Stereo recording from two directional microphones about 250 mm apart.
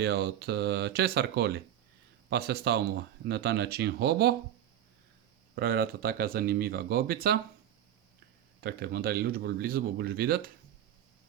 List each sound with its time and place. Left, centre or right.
0.0 s speech: right
5.5 s speech: right
8.6 s speech: right